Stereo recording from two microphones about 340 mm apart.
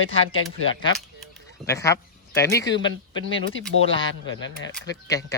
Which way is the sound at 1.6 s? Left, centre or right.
Centre.